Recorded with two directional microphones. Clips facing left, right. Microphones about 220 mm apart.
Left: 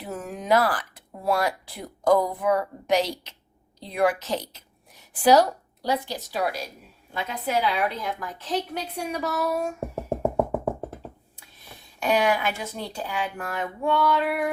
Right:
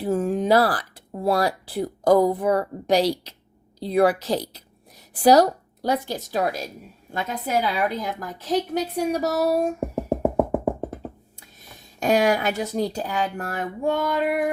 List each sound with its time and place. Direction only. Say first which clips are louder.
0.0 s a woman's voice: right 11 dB; 30° right (ahead or behind)
10.3 s music: right 3 dB; 5° right (ahead or behind)
11.9 s speech: right 3 dB; 40° right (ahead or behind)